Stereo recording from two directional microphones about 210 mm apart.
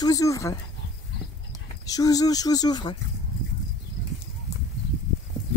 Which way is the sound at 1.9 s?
15° left (ahead or behind).